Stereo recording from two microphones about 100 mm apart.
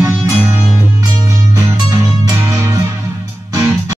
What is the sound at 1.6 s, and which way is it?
Music, 35° right (ahead or behind).